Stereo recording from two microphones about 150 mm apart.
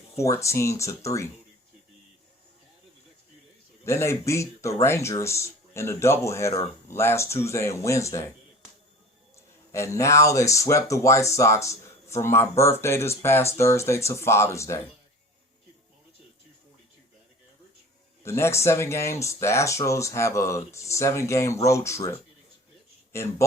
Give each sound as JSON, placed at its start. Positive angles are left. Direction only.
{"t": 0.2, "sound": "speech", "side_deg": 20}
{"t": 3.8, "sound": "a man's voice", "side_deg": 20}
{"t": 9.3, "sound": "speech", "side_deg": 20}
{"t": 18.2, "sound": "speech", "side_deg": 15}